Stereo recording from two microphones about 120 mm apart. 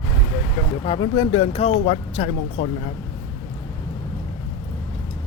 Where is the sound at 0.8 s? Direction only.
45° left (ahead or behind); by 2.7 s 60° left (ahead or behind).